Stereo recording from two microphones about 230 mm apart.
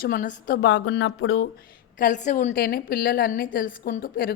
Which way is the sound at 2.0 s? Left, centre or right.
Left.